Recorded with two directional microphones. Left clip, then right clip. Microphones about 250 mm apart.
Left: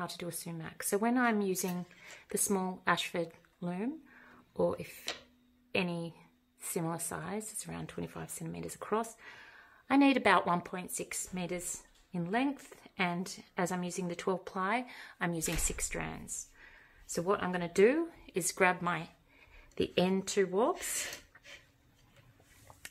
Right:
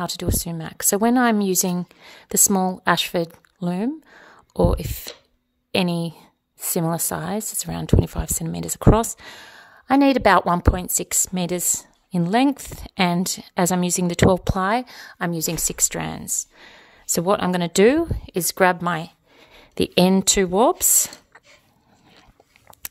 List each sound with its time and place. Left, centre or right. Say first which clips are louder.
0.0 s a woman's voice: right 14 dB; right